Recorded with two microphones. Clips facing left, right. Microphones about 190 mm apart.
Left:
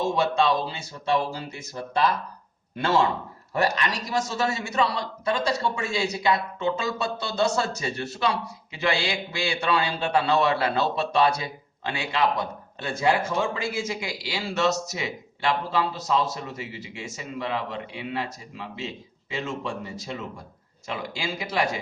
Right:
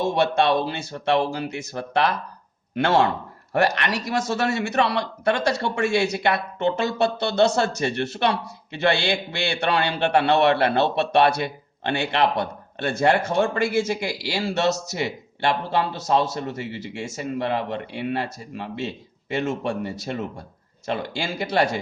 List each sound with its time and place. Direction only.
0.0 s a man's voice: 70° right (ahead or behind)